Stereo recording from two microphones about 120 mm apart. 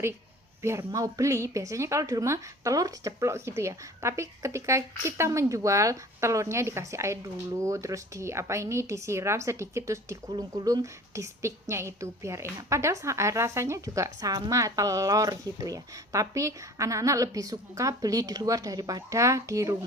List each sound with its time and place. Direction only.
0.6 s a woman's voice: 20° right (ahead or behind)